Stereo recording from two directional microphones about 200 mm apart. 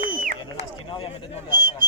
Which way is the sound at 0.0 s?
45° right (ahead or behind).